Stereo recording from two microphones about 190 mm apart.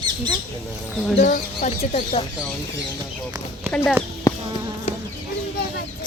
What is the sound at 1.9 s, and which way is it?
Speech, 30° left (ahead or behind).